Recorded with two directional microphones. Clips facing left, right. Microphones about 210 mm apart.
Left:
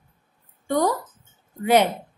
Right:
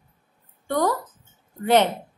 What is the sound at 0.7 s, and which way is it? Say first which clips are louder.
Speech: left 1 dB; 15° left (ahead or behind).